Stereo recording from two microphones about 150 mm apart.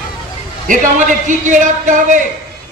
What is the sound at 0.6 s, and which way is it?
A man's voice, 60° right (ahead or behind).